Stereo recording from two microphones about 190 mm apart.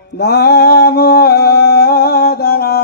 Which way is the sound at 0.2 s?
60° left (ahead or behind).